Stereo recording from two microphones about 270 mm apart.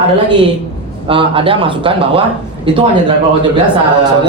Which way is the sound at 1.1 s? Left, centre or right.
Centre.